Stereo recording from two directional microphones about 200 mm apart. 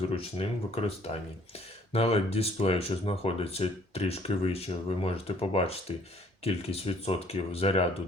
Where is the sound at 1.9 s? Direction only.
30° left (ahead or behind).